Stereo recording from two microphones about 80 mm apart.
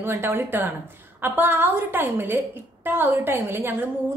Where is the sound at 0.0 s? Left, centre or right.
Right.